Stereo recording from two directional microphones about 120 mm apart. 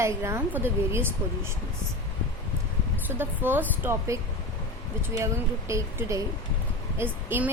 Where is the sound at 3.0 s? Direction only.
15° right (ahead or behind).